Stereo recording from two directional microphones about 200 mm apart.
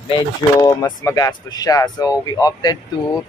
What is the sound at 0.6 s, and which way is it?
Speech, 20° left (ahead or behind).